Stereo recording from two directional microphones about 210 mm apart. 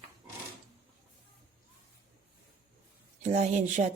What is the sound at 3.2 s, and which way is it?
Speech, 35° right (ahead or behind).